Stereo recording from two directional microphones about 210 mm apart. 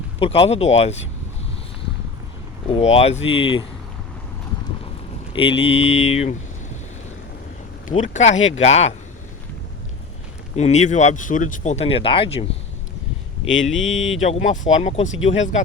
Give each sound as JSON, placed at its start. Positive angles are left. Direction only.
{"t": 0.2, "sound": "speech", "side_deg": 25}
{"t": 2.6, "sound": "speech", "side_deg": 30}
{"t": 5.3, "sound": "speech", "side_deg": 25}
{"t": 7.9, "sound": "speech", "side_deg": 35}
{"t": 10.5, "sound": "speech", "side_deg": 30}
{"t": 13.7, "sound": "speech", "side_deg": 0}
{"t": 14.2, "sound": "speech", "side_deg": 35}